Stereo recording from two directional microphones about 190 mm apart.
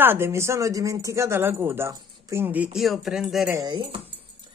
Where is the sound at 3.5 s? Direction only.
20° right (ahead or behind).